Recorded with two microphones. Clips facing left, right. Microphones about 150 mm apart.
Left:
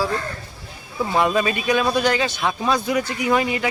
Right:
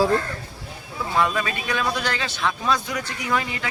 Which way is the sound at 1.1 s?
25° left (ahead or behind).